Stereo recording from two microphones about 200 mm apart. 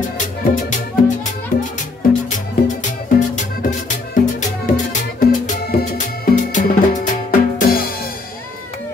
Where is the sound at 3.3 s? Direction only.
40° left (ahead or behind).